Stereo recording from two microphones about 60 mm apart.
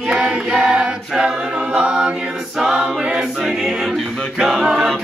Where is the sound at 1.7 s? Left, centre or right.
Centre.